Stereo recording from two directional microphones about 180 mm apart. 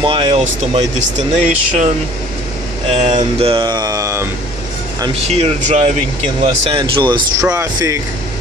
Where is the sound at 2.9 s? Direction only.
40° right (ahead or behind); by 4.2 s 20° right (ahead or behind).